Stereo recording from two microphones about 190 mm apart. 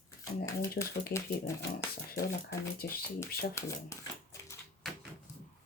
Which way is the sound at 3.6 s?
15° left (ahead or behind).